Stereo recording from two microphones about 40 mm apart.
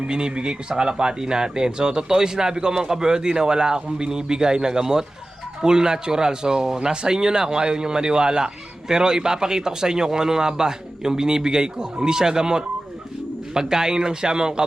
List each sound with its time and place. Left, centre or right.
0.1 s speech: right